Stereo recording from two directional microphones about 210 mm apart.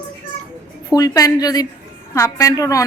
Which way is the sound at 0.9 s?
15° left (ahead or behind).